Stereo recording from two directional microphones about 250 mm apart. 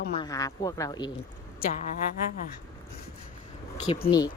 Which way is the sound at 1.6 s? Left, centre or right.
Left.